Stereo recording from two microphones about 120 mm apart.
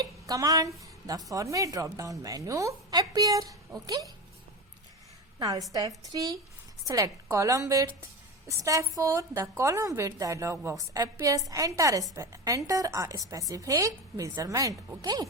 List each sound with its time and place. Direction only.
0.0 s a sound: 30° right (ahead or behind)
0.8 s a woman's voice: 30° right (ahead or behind)
5.4 s a woman's voice: 30° right (ahead or behind)